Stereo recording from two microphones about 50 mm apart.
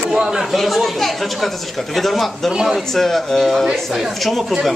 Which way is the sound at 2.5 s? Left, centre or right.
Centre.